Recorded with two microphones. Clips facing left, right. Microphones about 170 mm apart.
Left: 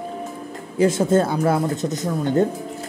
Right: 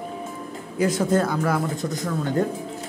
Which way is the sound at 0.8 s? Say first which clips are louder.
Left 4 dB; 25° left (ahead or behind).